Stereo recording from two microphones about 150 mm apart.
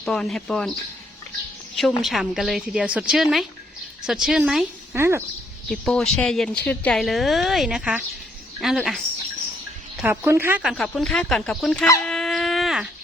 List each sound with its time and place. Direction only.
0.0 s a woman's voice: 5° left (ahead or behind)
2.0 s a woman's voice: centre (ahead or behind)
4.9 s a woman's voice: 15° right (ahead or behind)
5.6 s a woman's voice: 5° left (ahead or behind)
10.0 s a woman's voice: 15° right (ahead or behind)
10.6 s a woman's voice: centre (ahead or behind)
12.0 s a sound: 5° left (ahead or behind)